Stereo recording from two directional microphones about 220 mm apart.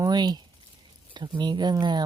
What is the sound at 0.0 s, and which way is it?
Speech, 20° right (ahead or behind).